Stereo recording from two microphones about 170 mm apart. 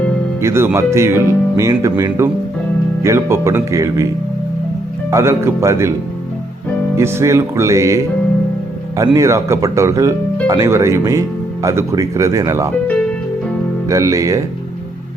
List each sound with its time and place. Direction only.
0.4 s speech: 15° right (ahead or behind)
5.1 s speech: 15° right (ahead or behind)
6.9 s speech: 15° right (ahead or behind)
9.1 s speech: 15° right (ahead or behind)
13.8 s speech: 20° right (ahead or behind)